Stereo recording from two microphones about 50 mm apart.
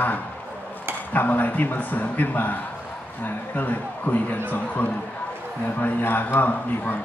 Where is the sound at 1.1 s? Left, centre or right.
Left.